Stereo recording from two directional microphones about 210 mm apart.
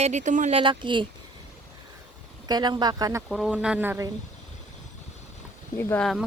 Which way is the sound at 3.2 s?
Centre (ahead or behind).